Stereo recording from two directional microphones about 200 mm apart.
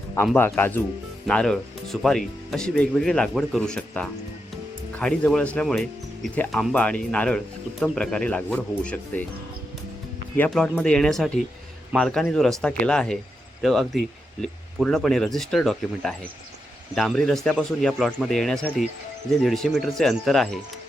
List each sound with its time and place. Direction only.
0.3 s speech: 10° left (ahead or behind)
10.3 s speech: 5° left (ahead or behind)